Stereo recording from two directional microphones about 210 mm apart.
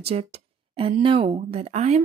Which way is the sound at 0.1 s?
30° right (ahead or behind).